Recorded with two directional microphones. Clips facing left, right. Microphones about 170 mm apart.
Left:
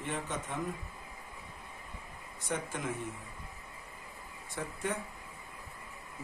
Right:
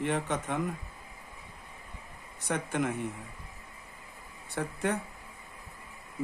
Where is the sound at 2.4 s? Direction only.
65° right (ahead or behind).